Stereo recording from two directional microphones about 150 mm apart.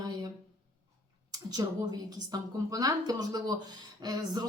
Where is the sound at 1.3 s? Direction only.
25° right (ahead or behind).